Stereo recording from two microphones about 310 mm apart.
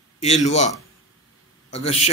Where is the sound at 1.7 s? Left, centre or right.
Centre.